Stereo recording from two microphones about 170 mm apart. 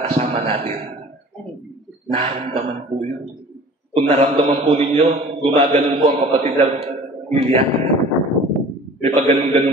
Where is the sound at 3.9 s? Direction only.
30° right (ahead or behind).